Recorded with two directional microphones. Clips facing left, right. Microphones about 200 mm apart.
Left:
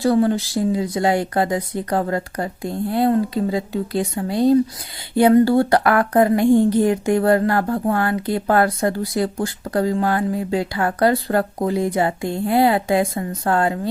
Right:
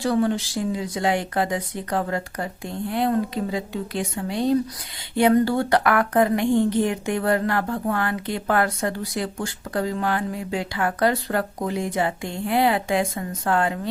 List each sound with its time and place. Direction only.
0.0 s a woman's voice: 35° left (ahead or behind)